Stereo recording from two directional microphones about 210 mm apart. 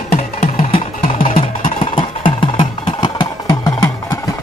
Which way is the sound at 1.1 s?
40° left (ahead or behind).